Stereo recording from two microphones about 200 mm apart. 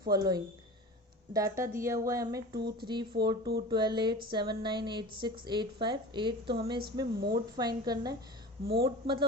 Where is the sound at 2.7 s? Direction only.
20° right (ahead or behind).